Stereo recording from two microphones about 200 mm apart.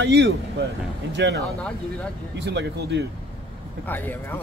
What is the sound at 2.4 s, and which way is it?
Speech, 60° right (ahead or behind).